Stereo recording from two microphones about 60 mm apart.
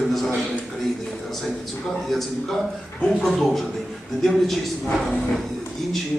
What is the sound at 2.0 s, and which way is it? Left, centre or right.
A man's voice, centre.